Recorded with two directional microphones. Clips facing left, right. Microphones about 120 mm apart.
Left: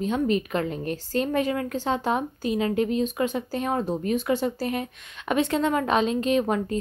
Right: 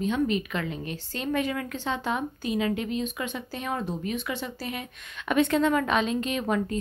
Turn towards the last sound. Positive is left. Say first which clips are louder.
# left 4 dB
turn(degrees=30)  # may be behind; listen again after turning